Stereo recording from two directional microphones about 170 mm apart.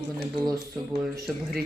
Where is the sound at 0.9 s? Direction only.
Centre (ahead or behind).